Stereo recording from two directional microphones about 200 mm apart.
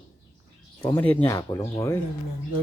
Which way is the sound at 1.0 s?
15° left (ahead or behind).